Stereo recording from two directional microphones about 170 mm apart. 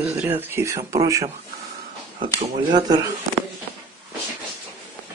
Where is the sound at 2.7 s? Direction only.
25° right (ahead or behind).